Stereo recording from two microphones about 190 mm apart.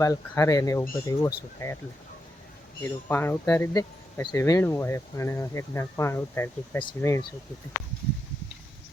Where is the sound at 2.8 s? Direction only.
10° left (ahead or behind).